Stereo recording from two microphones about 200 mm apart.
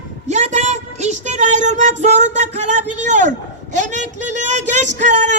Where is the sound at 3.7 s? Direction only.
35° right (ahead or behind).